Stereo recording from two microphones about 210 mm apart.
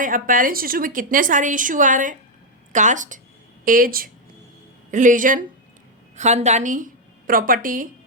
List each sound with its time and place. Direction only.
0.0 s a woman's voice: 40° right (ahead or behind)